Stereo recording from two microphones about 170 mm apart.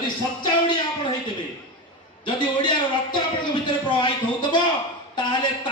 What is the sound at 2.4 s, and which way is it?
A man's voice, 25° left (ahead or behind).